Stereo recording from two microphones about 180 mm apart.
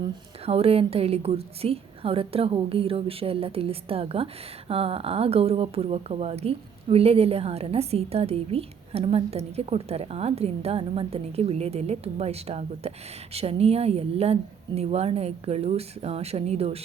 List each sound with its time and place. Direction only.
0.4 s a woman's voice: 35° right (ahead or behind)